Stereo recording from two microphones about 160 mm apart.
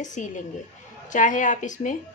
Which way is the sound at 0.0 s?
50° left (ahead or behind).